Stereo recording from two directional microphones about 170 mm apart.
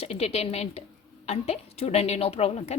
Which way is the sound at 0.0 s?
35° left (ahead or behind).